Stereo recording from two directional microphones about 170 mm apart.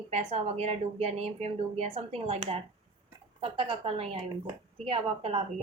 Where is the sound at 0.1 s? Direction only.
35° right (ahead or behind).